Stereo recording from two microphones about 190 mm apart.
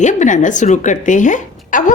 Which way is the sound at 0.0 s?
40° left (ahead or behind).